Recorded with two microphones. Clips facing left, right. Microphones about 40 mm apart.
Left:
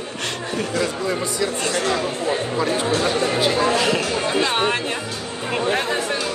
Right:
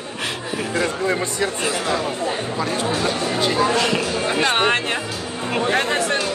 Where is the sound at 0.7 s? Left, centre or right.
Right.